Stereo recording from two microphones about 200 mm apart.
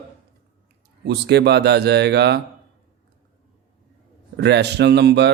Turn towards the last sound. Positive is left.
turn(degrees=-55)  # may be behind; listen again after turning